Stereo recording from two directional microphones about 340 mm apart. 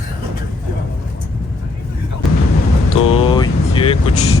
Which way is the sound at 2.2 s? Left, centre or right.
Centre.